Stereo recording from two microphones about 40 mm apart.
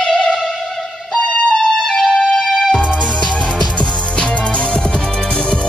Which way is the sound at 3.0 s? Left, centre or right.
Left.